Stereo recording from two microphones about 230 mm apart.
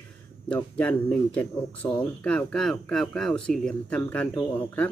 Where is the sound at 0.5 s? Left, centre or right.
Centre.